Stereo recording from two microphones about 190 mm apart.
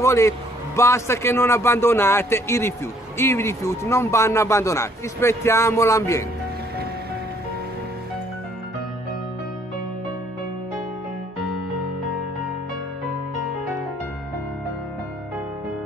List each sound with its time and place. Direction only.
0.0 s a man's voice: 15° left (ahead or behind)